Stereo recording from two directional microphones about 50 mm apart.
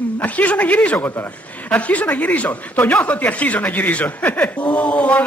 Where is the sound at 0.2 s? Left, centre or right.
Left.